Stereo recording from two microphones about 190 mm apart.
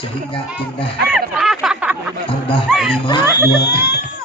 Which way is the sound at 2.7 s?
Centre (ahead or behind).